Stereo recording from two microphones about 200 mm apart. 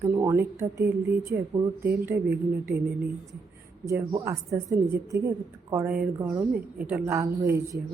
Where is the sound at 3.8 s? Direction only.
15° right (ahead or behind).